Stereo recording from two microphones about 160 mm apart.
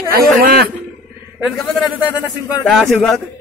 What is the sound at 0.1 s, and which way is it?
Speech, 70° right (ahead or behind).